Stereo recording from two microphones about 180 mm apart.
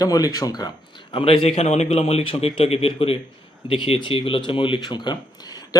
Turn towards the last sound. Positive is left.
turn(degrees=20)  # may be behind; listen again after turning